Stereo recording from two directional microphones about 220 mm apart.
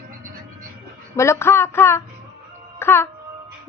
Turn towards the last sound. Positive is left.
turn(degrees=10)  # may be behind; listen again after turning